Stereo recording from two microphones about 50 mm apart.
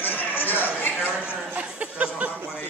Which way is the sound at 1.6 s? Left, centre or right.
Right.